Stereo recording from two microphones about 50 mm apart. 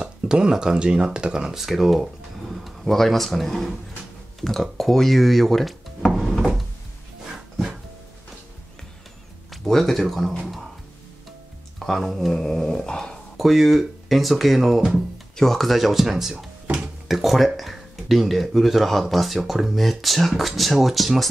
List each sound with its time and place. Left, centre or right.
0.0 s speech: centre
1.6 s speech: centre
9.5 s speech: centre
11.8 s speech: centre
13.4 s speech: centre
15.3 s speech: centre